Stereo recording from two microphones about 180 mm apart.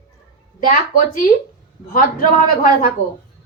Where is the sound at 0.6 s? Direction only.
50° left (ahead or behind).